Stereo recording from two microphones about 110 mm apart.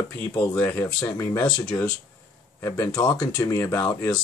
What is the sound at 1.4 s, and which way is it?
Speech, 10° left (ahead or behind).